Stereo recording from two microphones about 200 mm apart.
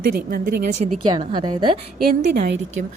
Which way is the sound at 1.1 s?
25° right (ahead or behind).